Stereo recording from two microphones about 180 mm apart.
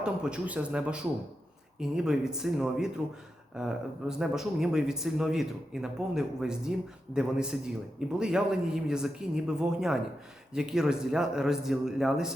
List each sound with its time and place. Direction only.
0.0 s a man's voice: 5° right (ahead or behind)